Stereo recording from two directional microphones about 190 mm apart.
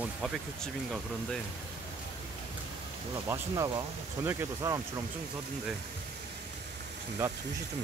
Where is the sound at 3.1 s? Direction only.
15° right (ahead or behind).